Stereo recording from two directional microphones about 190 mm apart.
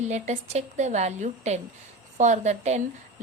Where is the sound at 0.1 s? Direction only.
35° right (ahead or behind).